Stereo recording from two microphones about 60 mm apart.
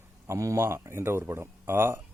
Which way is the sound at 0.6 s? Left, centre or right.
Right.